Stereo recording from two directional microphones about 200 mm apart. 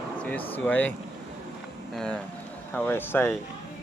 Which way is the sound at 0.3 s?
10° left (ahead or behind).